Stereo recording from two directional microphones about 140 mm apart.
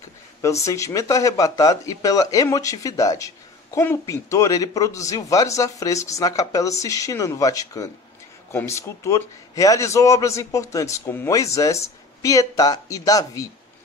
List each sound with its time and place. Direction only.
0.7 s speech: 20° left (ahead or behind)